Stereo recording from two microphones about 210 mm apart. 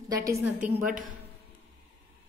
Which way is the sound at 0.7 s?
40° right (ahead or behind).